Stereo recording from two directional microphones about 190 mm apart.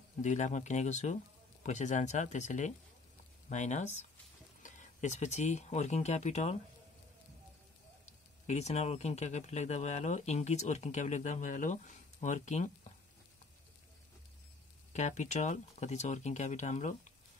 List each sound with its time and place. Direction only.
0.2 s speech: 40° left (ahead or behind)
8.0 s speech: 35° left (ahead or behind)
14.9 s speech: 40° left (ahead or behind)